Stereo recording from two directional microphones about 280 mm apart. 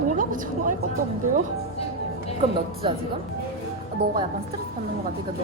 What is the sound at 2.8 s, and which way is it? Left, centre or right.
Speech, centre.